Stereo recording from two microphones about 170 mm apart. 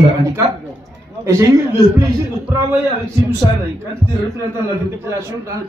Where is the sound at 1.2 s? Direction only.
15° right (ahead or behind).